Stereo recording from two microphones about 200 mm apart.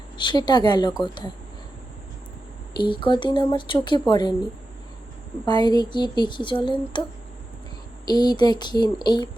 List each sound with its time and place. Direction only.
0.2 s speech: 20° left (ahead or behind)
2.7 s speech: 25° left (ahead or behind)
5.5 s speech: 20° left (ahead or behind)
8.0 s speech: 20° left (ahead or behind)